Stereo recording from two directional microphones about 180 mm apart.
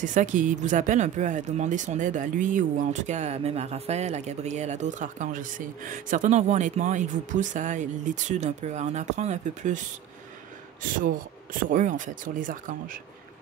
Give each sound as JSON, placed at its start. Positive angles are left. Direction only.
{"t": 0.0, "sound": "speech", "side_deg": -45}
{"t": 11.7, "sound": "speech", "side_deg": -45}